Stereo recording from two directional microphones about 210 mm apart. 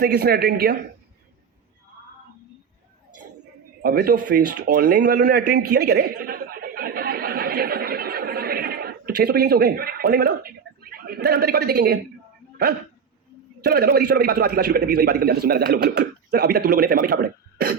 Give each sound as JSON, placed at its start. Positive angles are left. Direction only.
{"t": 0.0, "sound": "a man's voice", "side_deg": -50}
{"t": 3.8, "sound": "a man's voice", "side_deg": -50}
{"t": 5.7, "sound": "a sound", "side_deg": -50}
{"t": 13.6, "sound": "a man's voice", "side_deg": -50}